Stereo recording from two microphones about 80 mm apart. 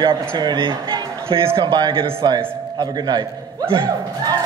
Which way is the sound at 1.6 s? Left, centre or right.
Right.